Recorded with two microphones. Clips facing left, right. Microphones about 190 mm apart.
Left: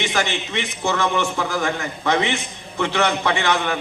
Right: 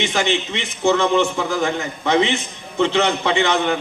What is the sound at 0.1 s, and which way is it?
A man's voice, 20° right (ahead or behind).